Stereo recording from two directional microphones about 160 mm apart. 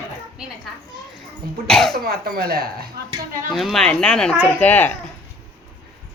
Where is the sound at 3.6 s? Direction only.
Centre (ahead or behind).